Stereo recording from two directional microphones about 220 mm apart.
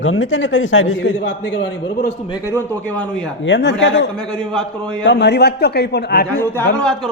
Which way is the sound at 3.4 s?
55° left (ahead or behind).